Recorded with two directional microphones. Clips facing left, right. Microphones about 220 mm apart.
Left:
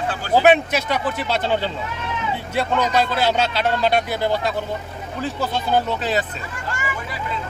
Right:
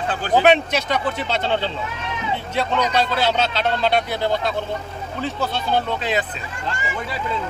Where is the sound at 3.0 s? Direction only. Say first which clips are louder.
Left 1 dB; 10° left (ahead or behind).